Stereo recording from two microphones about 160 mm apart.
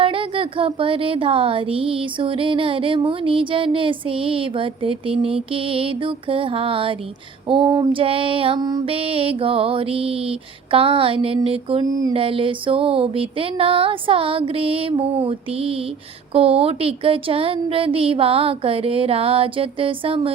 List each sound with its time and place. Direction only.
0.0 s speech: 35° right (ahead or behind)
8.9 s speech: 35° right (ahead or behind)
11.9 s mantra: 20° right (ahead or behind)
12.1 s speech: 35° right (ahead or behind)